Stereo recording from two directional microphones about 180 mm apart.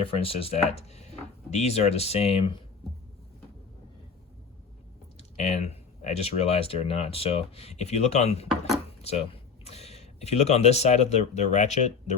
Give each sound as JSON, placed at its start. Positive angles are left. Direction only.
{"t": 0.0, "sound": "speech", "side_deg": 30}
{"t": 5.1, "sound": "speech", "side_deg": 35}
{"t": 8.4, "sound": "speech", "side_deg": 0}
{"t": 9.0, "sound": "speech", "side_deg": 35}